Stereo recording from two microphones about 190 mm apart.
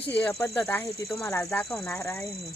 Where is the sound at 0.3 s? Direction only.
20° left (ahead or behind).